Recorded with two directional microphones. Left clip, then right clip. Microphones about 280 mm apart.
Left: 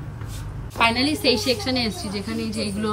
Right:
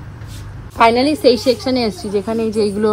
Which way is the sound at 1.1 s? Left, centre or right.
Centre.